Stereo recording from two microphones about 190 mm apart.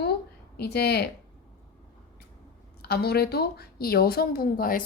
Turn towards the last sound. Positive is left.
turn(degrees=50)  # may be behind; listen again after turning